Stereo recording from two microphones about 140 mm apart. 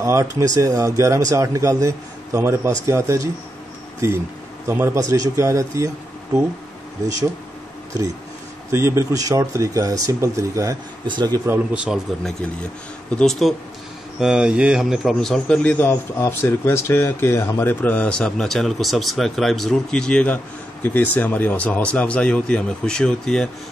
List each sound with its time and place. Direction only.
0.0 s speech: 25° right (ahead or behind)
8.7 s speech: 20° right (ahead or behind)
11.4 s speech: 10° right (ahead or behind)
13.1 s a man's voice: 5° left (ahead or behind)